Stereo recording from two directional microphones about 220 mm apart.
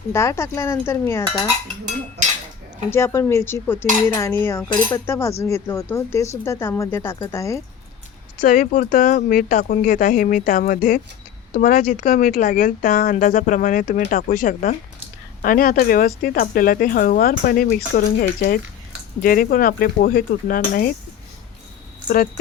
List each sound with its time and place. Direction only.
0.1 s speech: 15° left (ahead or behind)
2.2 s cutlery: 50° right (ahead or behind)
2.9 s speech: 10° left (ahead or behind)
8.4 s speech: 40° left (ahead or behind)